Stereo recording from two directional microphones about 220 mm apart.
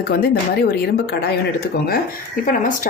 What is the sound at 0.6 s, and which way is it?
Speech, 45° left (ahead or behind).